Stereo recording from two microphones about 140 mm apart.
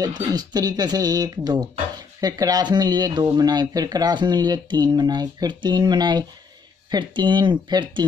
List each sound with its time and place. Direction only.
0.3 s speech: 30° right (ahead or behind)